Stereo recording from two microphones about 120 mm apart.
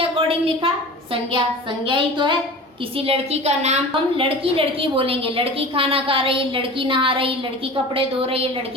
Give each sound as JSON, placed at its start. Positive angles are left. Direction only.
{"t": 0.0, "sound": "a sound", "side_deg": -50}
{"t": 1.9, "sound": "a woman's voice", "side_deg": -40}
{"t": 3.1, "sound": "a woman's voice", "side_deg": -65}
{"t": 4.2, "sound": "a woman's voice", "side_deg": -50}